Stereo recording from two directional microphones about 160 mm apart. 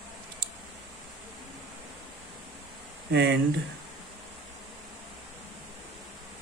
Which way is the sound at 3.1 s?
90° right.